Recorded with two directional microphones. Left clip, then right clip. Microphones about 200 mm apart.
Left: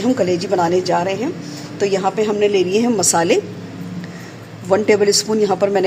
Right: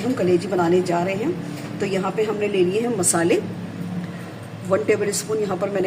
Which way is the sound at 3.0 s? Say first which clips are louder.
Left 4 dB; 45° left (ahead or behind).